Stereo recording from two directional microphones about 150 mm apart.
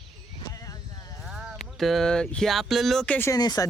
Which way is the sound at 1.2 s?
5° right (ahead or behind).